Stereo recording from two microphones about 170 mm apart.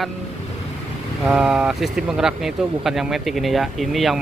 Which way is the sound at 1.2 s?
5° right (ahead or behind).